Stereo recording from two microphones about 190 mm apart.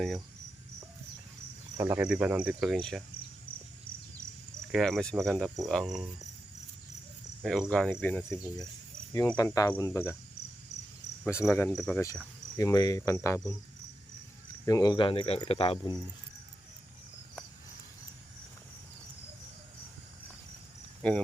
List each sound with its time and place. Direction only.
1.8 s cricket: 10° right (ahead or behind)
4.7 s cricket: centre (ahead or behind)
7.4 s cricket: centre (ahead or behind)
11.4 s cricket: 10° left (ahead or behind)
14.6 s speech: 20° left (ahead or behind)
21.0 s cricket: 5° left (ahead or behind)